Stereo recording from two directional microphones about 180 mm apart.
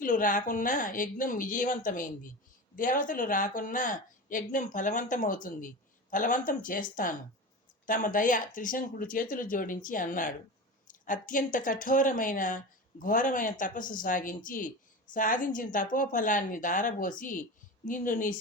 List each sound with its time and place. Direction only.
0.0 s speech: 50° left (ahead or behind)